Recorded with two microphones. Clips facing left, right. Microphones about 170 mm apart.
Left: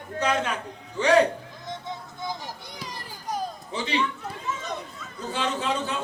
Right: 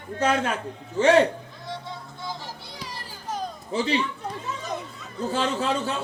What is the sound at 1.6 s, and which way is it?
Children playing, 20° left (ahead or behind).